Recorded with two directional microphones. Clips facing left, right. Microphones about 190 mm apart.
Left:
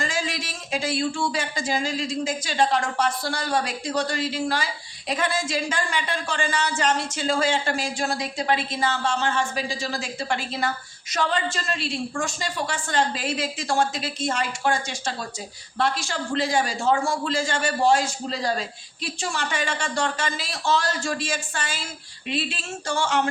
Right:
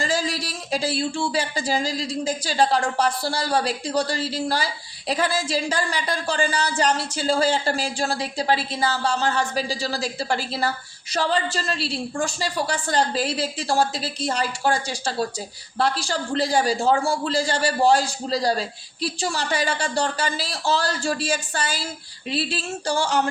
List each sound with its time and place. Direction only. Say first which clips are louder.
0.0 s speech: right 3 dB; 35° right (ahead or behind)